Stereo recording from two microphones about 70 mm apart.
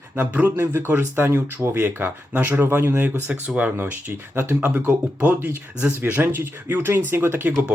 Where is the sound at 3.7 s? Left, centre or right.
Right.